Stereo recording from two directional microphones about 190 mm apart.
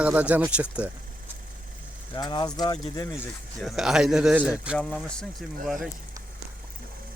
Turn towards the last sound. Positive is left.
turn(degrees=0)  # may be behind; listen again after turning